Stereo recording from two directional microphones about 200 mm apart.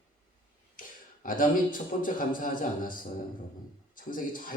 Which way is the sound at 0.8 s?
45° left (ahead or behind).